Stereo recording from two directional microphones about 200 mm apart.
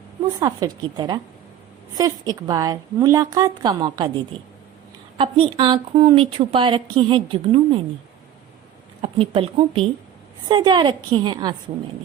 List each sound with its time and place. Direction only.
0.3 s a woman's voice: 20° right (ahead or behind)
5.1 s a woman's voice: 25° right (ahead or behind)
9.0 s a woman's voice: 25° right (ahead or behind)